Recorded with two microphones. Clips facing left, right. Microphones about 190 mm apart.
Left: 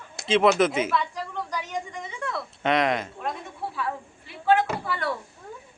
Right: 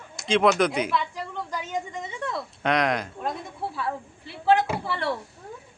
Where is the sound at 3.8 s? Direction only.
35° right (ahead or behind).